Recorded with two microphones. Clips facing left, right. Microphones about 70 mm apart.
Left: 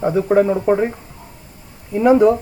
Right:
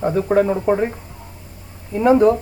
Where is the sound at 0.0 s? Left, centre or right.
Centre.